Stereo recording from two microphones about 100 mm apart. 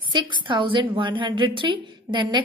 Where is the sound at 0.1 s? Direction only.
55° right (ahead or behind).